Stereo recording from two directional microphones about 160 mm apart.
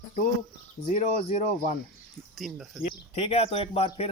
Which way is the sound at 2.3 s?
Centre (ahead or behind).